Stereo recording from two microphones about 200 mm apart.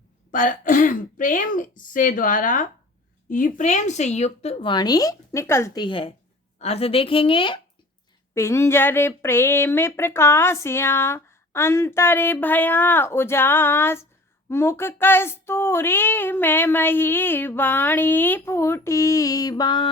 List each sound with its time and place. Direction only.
0.3 s a woman's voice: 40° left (ahead or behind)
8.4 s speech: 15° left (ahead or behind)